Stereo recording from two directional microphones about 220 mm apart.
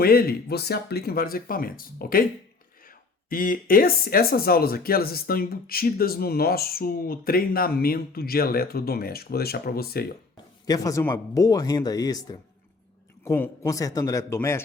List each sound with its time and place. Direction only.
0.0 s speech: 45° left (ahead or behind)
3.2 s speech: 40° left (ahead or behind)
10.7 s speech: 15° left (ahead or behind)